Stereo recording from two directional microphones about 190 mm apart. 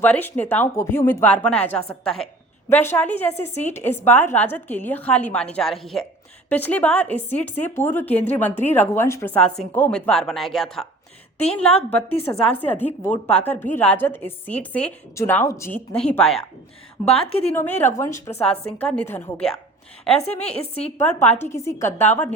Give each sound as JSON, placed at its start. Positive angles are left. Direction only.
{"t": 0.0, "sound": "a woman's voice", "side_deg": 10}
{"t": 11.9, "sound": "a woman's voice", "side_deg": 10}
{"t": 17.1, "sound": "a woman's voice", "side_deg": 30}
{"t": 17.7, "sound": "a woman's voice", "side_deg": 15}
{"t": 20.1, "sound": "a woman's voice", "side_deg": 35}
{"t": 21.0, "sound": "a woman's voice", "side_deg": 10}